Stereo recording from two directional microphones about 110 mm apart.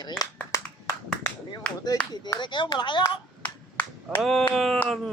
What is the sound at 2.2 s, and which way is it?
Speech, 40° left (ahead or behind).